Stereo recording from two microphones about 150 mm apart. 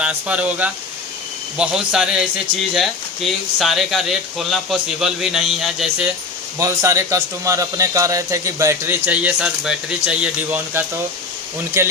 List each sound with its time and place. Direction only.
0.0 s speech: 10° right (ahead or behind)
6.6 s speech: 20° right (ahead or behind)